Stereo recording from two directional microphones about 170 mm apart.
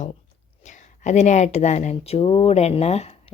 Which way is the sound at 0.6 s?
45° left (ahead or behind).